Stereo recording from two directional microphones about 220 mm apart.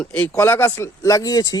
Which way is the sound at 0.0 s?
5° left (ahead or behind).